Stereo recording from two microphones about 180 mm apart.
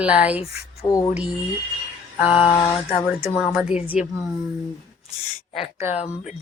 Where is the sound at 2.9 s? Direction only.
5° right (ahead or behind).